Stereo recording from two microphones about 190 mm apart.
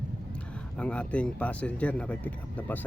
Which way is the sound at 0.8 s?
5° left (ahead or behind).